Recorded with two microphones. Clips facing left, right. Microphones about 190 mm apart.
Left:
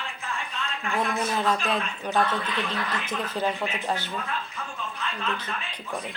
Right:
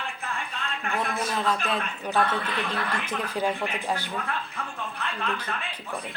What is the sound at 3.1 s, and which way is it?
Speech, 10° right (ahead or behind).